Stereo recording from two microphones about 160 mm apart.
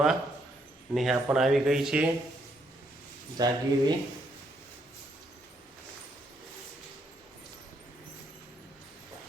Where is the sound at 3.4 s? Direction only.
25° right (ahead or behind).